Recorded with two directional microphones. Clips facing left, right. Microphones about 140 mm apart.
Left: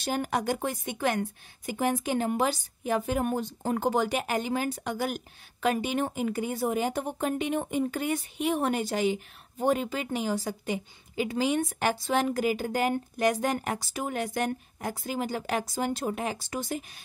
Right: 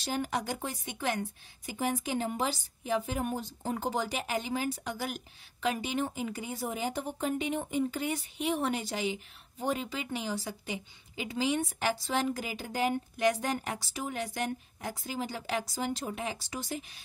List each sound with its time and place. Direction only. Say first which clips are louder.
0.0 s a woman's voice: left 4 dB; 55° left (ahead or behind)